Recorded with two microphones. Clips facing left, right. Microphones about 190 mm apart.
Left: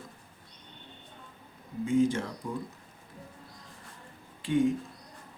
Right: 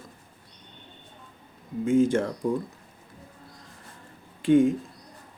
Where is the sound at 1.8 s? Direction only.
50° right (ahead or behind).